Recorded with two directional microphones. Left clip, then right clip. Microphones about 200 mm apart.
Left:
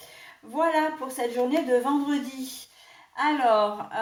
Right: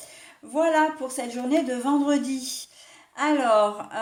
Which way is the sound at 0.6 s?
50° right (ahead or behind).